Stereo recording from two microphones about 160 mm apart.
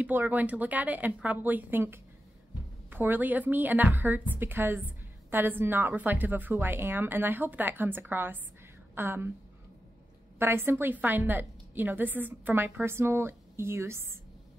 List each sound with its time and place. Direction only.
0.0 s a woman's voice: 10° right (ahead or behind)
10.4 s a woman's voice: 15° right (ahead or behind)